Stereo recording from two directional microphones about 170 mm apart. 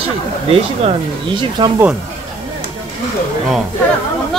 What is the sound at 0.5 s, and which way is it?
Speech, 30° right (ahead or behind).